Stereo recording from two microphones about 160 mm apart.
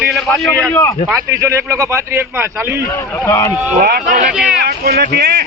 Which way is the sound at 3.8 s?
70° right (ahead or behind).